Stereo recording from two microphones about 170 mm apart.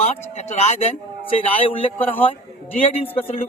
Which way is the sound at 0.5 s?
40° left (ahead or behind).